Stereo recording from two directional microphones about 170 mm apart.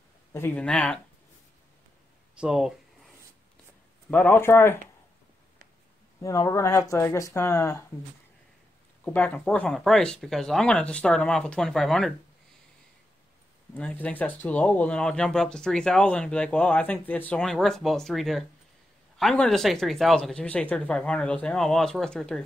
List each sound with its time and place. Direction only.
0.3 s speech: 10° left (ahead or behind)
2.4 s speech: 5° right (ahead or behind)
4.1 s speech: 10° left (ahead or behind)
6.2 s speech: 20° left (ahead or behind)
9.0 s speech: 10° left (ahead or behind)
13.7 s speech: 10° left (ahead or behind)